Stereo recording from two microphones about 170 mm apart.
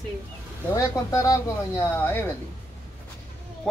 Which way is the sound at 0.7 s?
20° left (ahead or behind).